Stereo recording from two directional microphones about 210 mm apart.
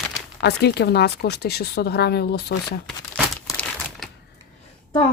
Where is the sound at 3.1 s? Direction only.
Centre (ahead or behind).